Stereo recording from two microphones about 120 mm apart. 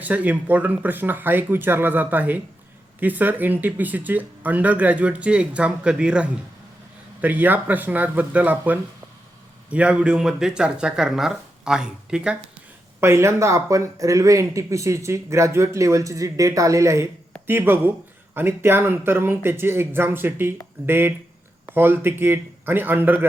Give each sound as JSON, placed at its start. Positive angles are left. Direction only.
{"t": 0.0, "sound": "speech", "side_deg": -15}
{"t": 13.0, "sound": "speech", "side_deg": -20}